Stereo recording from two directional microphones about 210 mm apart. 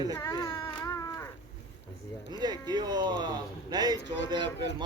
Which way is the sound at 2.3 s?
20° right (ahead or behind).